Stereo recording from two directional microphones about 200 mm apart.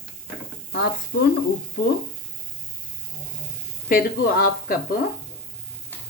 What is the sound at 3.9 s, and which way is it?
Speech, 50° left (ahead or behind).